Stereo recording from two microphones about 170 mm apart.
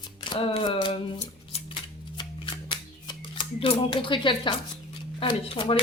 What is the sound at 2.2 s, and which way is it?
Shuffling cards, 30° left (ahead or behind).